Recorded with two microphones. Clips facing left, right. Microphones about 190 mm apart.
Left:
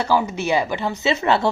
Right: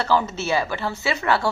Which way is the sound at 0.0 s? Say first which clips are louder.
Left 2 dB; 10° left (ahead or behind).